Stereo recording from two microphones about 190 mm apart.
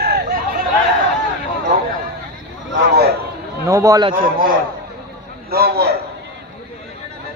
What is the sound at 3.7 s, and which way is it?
Speech, 15° right (ahead or behind).